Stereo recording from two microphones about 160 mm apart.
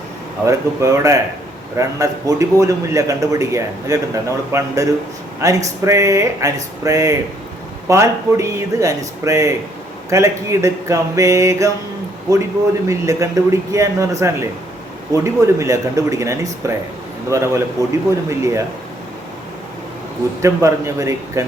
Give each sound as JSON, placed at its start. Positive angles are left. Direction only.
{"t": 0.4, "sound": "a man's voice", "side_deg": -20}
{"t": 20.4, "sound": "a man's voice", "side_deg": -20}